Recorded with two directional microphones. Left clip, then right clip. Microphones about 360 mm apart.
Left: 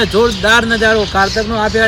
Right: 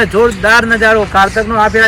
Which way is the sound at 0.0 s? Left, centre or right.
Centre.